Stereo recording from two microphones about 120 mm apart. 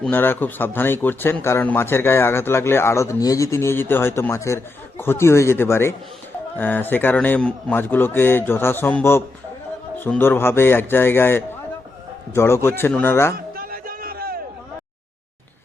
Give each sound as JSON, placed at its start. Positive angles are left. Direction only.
{"t": 0.1, "sound": "a man's voice", "side_deg": 15}